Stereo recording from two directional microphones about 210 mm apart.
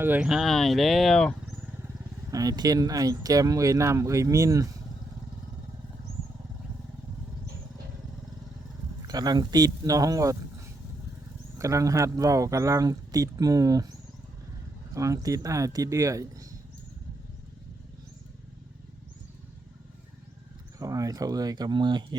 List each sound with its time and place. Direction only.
0.0 s speech: 5° right (ahead or behind)
2.3 s speech: 15° right (ahead or behind)
9.0 s speech: 20° right (ahead or behind)
11.5 s speech: 15° right (ahead or behind)
14.9 s speech: 15° right (ahead or behind)
20.7 s speech: 15° right (ahead or behind)